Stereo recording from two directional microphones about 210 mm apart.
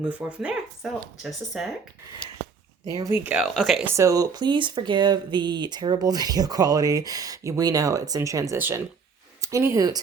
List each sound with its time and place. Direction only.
0.0 s speech: 5° right (ahead or behind)
2.9 s speech: 15° right (ahead or behind)
3.9 s speech: 15° right (ahead or behind)